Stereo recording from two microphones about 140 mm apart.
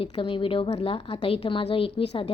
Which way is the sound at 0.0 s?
35° left (ahead or behind).